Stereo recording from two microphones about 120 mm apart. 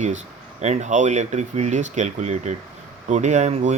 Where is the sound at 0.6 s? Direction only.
75° right (ahead or behind).